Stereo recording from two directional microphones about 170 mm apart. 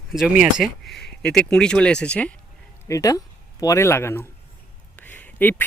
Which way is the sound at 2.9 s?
20° left (ahead or behind).